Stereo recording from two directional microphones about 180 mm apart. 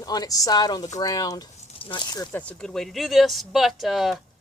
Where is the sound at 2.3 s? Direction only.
5° left (ahead or behind).